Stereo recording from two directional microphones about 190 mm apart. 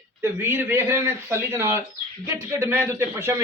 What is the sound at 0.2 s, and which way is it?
Speech, 10° right (ahead or behind).